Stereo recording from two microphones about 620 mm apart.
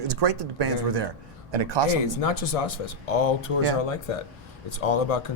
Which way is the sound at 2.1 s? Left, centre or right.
Left.